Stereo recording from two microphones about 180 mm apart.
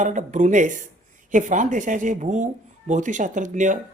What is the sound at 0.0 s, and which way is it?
Speech, 45° right (ahead or behind).